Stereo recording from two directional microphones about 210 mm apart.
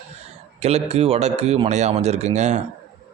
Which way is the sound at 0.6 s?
30° right (ahead or behind).